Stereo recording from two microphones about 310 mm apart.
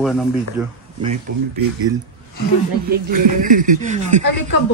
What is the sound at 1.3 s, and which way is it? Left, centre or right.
Speech, right.